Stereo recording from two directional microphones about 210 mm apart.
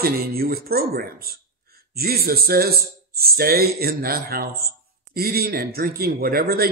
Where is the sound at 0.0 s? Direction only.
45° right (ahead or behind).